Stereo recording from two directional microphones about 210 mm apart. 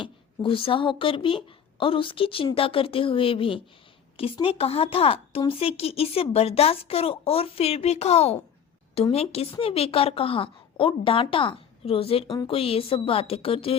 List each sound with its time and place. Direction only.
0.0 s a woman's voice: 25° left (ahead or behind)